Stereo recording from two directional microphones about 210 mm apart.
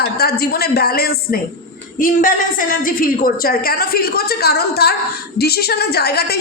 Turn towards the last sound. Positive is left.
turn(degrees=50)  # may be behind; listen again after turning